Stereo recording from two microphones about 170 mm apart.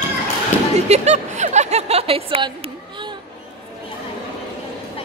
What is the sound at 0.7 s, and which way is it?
Speech, 40° right (ahead or behind).